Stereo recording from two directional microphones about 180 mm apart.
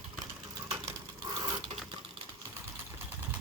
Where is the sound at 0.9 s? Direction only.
20° right (ahead or behind).